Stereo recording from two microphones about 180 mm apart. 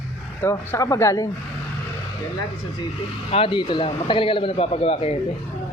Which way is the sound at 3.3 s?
30° left (ahead or behind).